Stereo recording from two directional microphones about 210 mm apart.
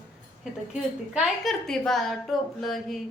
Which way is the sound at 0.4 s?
5° right (ahead or behind).